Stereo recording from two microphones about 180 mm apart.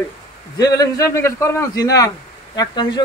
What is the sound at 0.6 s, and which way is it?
A man's voice, 20° left (ahead or behind).